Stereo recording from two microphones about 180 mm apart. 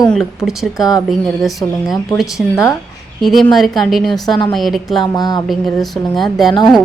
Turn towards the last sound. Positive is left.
turn(degrees=0)  # may be behind; listen again after turning